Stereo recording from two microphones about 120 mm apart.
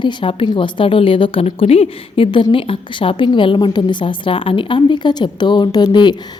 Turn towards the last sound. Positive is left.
turn(degrees=40)  # may be behind; listen again after turning